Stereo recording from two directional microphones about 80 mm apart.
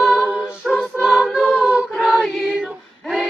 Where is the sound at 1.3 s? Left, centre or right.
Centre.